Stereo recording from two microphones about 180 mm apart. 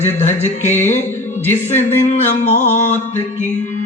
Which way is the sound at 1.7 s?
40° left (ahead or behind).